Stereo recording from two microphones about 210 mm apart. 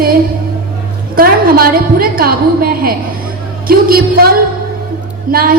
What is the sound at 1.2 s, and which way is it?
A woman's voice, 45° right (ahead or behind).